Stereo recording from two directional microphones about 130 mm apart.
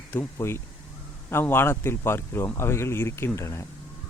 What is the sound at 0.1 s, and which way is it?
Speech, 20° left (ahead or behind).